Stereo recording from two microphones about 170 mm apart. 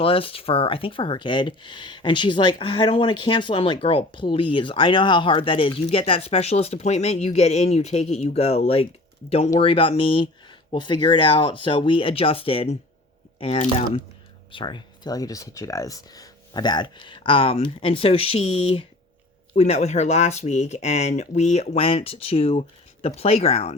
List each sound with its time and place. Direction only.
0.0 s speech: 35° left (ahead or behind)